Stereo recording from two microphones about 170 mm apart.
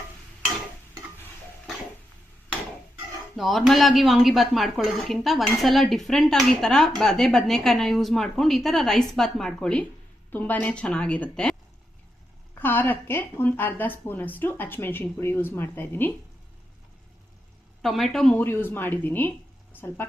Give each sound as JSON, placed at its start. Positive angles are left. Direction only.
{"t": 3.3, "sound": "speech", "side_deg": 0}
{"t": 12.5, "sound": "speech", "side_deg": 10}
{"t": 17.8, "sound": "speech", "side_deg": 0}